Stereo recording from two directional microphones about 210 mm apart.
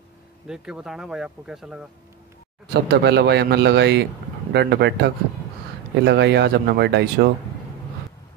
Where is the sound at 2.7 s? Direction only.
55° right (ahead or behind).